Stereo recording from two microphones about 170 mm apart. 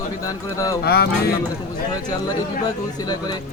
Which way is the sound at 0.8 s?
65° left (ahead or behind).